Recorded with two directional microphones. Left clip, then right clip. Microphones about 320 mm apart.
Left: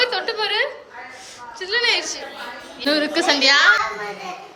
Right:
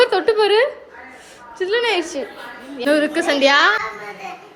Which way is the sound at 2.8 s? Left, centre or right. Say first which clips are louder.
Right 1 dB; centre.